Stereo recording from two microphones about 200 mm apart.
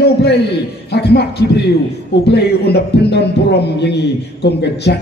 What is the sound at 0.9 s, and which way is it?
A man's voice, 55° left (ahead or behind).